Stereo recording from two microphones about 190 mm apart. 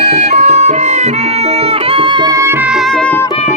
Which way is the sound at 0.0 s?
35° right (ahead or behind).